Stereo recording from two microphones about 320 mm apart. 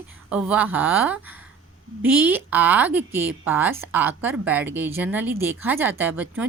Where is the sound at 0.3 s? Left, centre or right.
Centre.